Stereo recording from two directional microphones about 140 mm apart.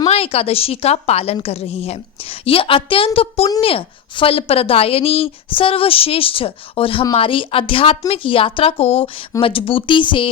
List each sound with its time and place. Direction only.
0.1 s a woman's voice: 45° left (ahead or behind)